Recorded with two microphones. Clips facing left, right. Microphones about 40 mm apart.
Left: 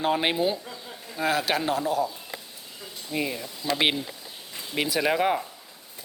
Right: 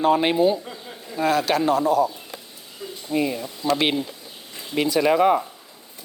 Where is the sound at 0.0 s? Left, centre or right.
Centre.